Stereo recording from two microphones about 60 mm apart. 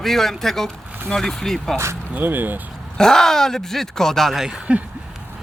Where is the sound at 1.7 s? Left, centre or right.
Right.